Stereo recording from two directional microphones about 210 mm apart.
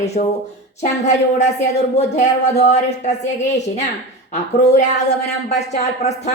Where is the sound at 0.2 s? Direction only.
40° left (ahead or behind).